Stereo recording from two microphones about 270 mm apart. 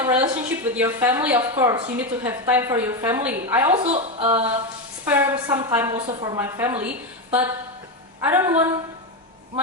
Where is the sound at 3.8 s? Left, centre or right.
Right.